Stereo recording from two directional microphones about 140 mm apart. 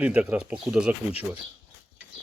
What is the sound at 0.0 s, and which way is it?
Speech, 10° right (ahead or behind).